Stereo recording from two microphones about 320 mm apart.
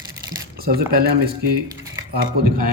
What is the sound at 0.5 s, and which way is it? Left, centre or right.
A man's voice, right.